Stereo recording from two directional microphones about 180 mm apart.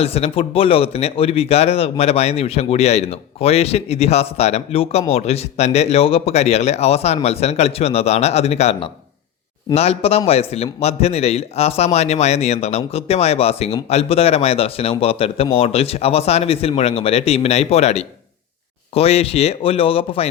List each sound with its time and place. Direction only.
0.0 s a man's voice: 35° left (ahead or behind)